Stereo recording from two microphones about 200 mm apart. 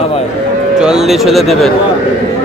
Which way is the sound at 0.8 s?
5° right (ahead or behind).